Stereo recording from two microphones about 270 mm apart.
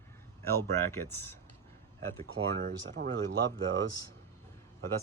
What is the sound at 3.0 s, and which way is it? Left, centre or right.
Speech, right.